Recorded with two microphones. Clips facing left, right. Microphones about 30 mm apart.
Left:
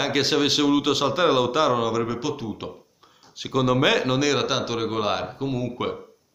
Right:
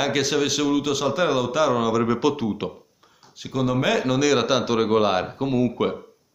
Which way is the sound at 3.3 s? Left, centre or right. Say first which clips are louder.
Left 2 dB; left.